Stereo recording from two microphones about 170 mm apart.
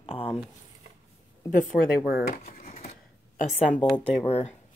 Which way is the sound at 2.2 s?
60° left (ahead or behind).